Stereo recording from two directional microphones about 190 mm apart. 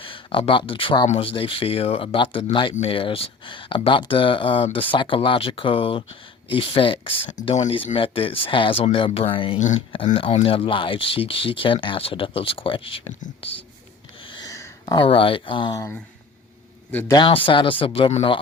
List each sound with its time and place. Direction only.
0.0 s speech: 25° left (ahead or behind)
14.3 s a sound: 20° left (ahead or behind)
15.0 s a man's voice: 30° left (ahead or behind); by 17.2 s 10° left (ahead or behind)
17.2 s speech: 25° left (ahead or behind)